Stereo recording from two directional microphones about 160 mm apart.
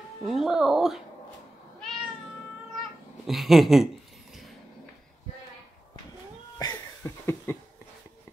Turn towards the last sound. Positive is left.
turn(degrees=15)  # may be behind; listen again after turning